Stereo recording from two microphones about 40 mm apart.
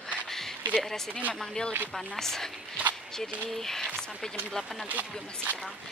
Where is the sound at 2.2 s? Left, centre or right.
Centre.